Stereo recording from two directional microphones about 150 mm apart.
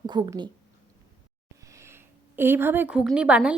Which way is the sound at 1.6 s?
20° right (ahead or behind).